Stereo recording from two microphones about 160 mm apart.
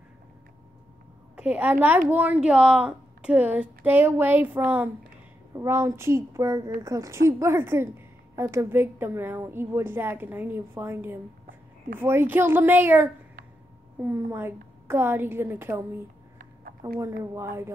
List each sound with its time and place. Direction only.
1.3 s a woman's voice: 5° right (ahead or behind)
17.0 s a woman's voice: 20° right (ahead or behind)